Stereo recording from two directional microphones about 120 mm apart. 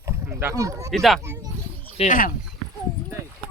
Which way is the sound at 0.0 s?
20° right (ahead or behind).